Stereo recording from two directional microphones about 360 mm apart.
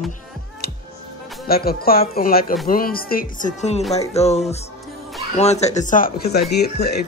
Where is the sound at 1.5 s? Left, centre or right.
Left.